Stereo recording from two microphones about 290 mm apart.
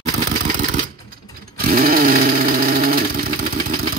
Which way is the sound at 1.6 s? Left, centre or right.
Right.